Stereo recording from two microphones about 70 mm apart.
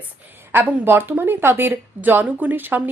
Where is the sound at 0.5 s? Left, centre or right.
Right.